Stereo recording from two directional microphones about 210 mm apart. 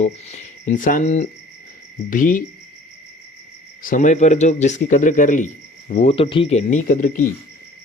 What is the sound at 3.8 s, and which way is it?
Speech, 40° left (ahead or behind).